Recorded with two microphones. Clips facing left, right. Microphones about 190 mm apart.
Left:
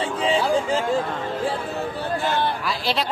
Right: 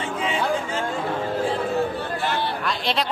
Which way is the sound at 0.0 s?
35° left (ahead or behind).